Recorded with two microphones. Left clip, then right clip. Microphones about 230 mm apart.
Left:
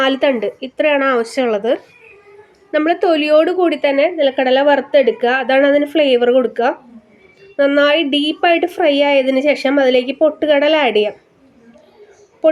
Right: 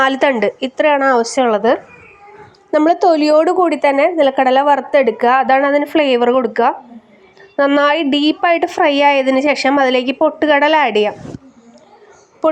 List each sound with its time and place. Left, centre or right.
0.0 s a woman's voice: centre
1.2 s a woman's voice: centre
3.1 s a woman's voice: right